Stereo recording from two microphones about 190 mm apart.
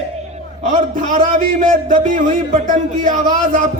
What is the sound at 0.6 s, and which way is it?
A man's voice, 40° right (ahead or behind).